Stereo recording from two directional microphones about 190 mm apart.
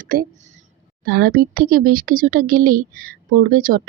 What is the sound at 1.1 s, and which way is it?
A woman's voice, 50° right (ahead or behind).